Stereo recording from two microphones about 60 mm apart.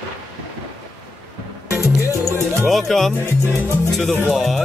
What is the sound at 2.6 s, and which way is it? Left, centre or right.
Music, centre.